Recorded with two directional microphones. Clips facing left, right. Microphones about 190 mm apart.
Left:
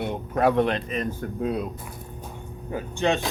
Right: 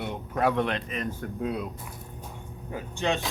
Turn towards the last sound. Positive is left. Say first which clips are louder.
# left 4 dB
turn(degrees=55)  # may be behind; listen again after turning